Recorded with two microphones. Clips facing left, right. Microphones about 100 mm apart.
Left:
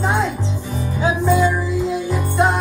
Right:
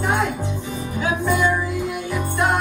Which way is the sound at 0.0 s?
20° left (ahead or behind).